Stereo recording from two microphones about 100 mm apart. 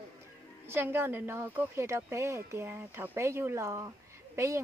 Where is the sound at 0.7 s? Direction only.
25° right (ahead or behind).